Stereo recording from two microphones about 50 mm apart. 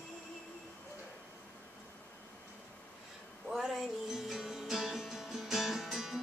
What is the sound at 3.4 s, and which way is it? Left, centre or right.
Music, centre.